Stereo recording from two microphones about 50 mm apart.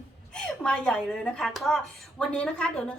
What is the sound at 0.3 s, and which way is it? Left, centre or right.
A woman's voice, centre.